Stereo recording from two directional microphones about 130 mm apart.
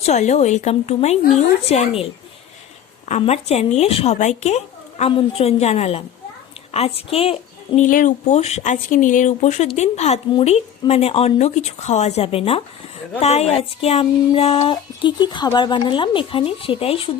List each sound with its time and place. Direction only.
0.0 s speech: 60° left (ahead or behind)
3.1 s a woman's voice: 55° left (ahead or behind)
7.8 s speech: 85° left
8.4 s speech: 55° left (ahead or behind)